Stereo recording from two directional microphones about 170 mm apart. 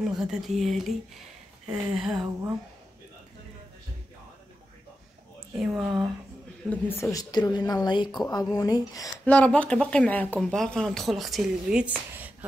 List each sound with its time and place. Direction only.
0.0 s speech: 5° right (ahead or behind)
5.8 s speech: 5° right (ahead or behind)
6.7 s a woman's voice: 15° left (ahead or behind)
9.2 s speech: 10° left (ahead or behind); by 12.4 s 10° right (ahead or behind)